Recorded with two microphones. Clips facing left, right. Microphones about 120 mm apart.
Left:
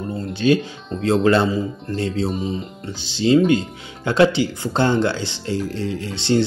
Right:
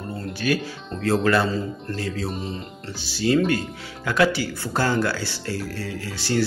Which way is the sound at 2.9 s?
20° left (ahead or behind).